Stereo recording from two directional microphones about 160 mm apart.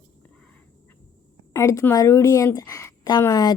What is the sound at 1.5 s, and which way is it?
A woman's voice, 20° left (ahead or behind).